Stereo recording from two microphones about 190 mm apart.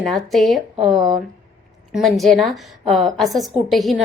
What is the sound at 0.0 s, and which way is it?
Speech, centre (ahead or behind).